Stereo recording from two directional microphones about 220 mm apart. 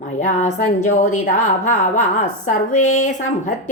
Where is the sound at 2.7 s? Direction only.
70° left (ahead or behind).